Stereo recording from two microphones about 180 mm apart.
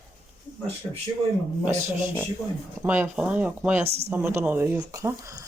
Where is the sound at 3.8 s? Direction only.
35° right (ahead or behind).